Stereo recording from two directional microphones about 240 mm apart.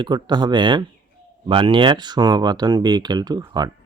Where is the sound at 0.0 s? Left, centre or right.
Centre.